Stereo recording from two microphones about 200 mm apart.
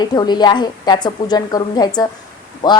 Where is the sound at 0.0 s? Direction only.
20° left (ahead or behind).